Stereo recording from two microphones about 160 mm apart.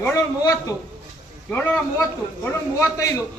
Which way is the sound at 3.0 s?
20° left (ahead or behind).